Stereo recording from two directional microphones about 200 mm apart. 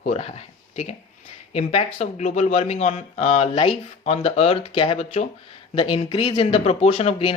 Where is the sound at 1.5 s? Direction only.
30° left (ahead or behind).